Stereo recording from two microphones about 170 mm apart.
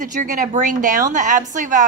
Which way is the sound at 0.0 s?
50° right (ahead or behind).